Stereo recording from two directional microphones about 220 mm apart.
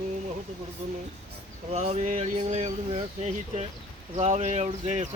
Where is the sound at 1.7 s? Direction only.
30° right (ahead or behind).